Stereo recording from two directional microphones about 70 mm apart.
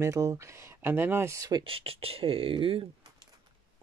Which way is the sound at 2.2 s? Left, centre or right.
Right.